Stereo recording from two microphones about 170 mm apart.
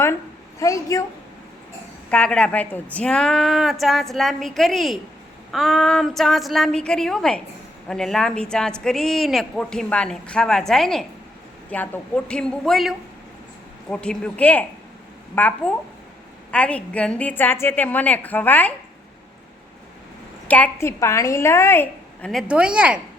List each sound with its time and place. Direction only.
0.6 s a woman's voice: 20° left (ahead or behind)
2.0 s a woman's voice: 5° left (ahead or behind)
13.9 s a woman's voice: 5° left (ahead or behind)
20.5 s a woman's voice: 10° left (ahead or behind)
22.3 s a woman's voice: centre (ahead or behind)